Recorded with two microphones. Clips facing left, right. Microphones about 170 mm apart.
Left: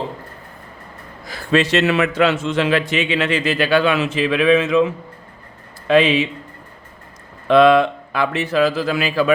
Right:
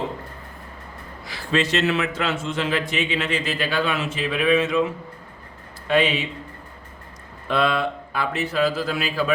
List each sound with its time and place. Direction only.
1.2 s a man's voice: 50° left (ahead or behind); by 4.8 s 90° left
5.9 s speech: 90° left
7.4 s speech: 90° left